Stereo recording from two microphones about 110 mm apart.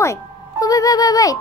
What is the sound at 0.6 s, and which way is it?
Music, 35° left (ahead or behind).